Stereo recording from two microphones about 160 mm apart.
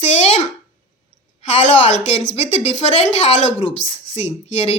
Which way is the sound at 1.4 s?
40° left (ahead or behind).